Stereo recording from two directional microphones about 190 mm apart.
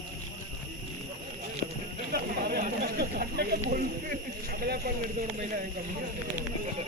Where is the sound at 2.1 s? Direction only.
55° right (ahead or behind).